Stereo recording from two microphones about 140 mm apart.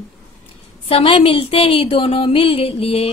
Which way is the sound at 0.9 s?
40° left (ahead or behind).